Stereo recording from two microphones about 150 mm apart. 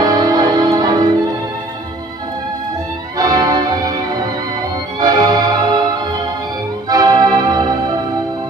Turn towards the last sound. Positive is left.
turn(degrees=-25)  # may be behind; listen again after turning